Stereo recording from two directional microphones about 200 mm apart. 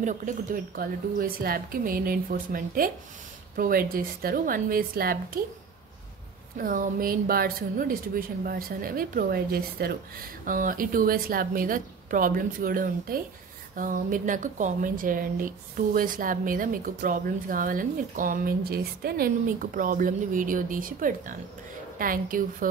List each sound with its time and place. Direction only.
0.0 s speech: 40° right (ahead or behind)
6.6 s speech: 45° right (ahead or behind)